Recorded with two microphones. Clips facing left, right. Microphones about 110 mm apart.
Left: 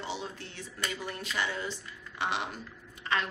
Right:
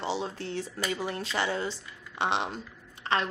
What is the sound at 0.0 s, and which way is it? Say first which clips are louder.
A woman's voice: right 6 dB; 30° right (ahead or behind).